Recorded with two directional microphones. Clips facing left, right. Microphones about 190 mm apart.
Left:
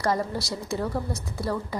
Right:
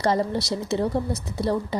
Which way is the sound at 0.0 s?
25° right (ahead or behind).